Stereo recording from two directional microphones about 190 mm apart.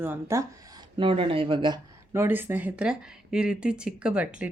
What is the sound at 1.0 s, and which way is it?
Speech, 30° right (ahead or behind).